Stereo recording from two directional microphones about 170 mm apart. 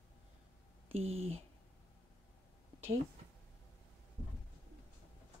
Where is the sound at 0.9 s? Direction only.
35° right (ahead or behind).